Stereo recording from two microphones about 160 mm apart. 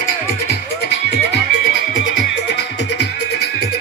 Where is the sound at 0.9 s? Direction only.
90° left.